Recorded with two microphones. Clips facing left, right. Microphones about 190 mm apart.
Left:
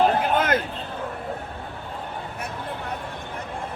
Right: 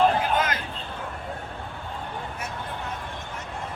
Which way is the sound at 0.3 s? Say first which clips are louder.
Left 5 dB; 55° left (ahead or behind).